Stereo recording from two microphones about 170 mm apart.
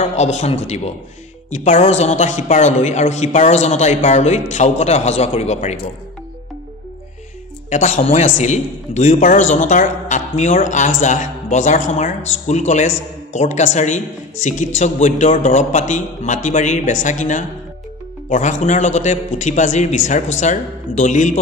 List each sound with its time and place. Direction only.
0.0 s a man's voice: 40° left (ahead or behind)
7.7 s a man's voice: 45° left (ahead or behind)